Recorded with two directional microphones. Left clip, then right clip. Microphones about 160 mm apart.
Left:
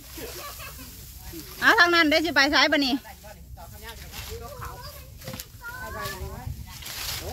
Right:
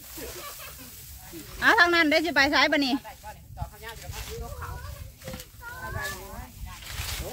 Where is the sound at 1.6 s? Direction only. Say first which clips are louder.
Left 2 dB; 5° left (ahead or behind).